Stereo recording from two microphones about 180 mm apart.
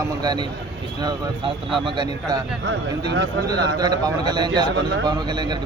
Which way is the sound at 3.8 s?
25° right (ahead or behind).